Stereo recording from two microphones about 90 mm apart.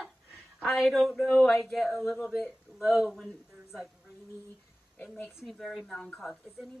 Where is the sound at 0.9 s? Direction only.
5° left (ahead or behind).